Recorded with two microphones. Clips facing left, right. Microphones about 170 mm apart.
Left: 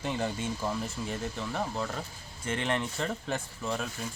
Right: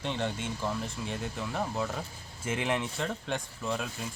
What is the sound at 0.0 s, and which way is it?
A man's voice, 5° left (ahead or behind).